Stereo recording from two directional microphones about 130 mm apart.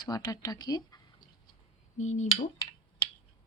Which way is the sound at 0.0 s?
30° left (ahead or behind).